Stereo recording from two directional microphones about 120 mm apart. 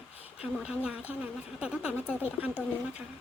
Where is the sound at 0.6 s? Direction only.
10° right (ahead or behind).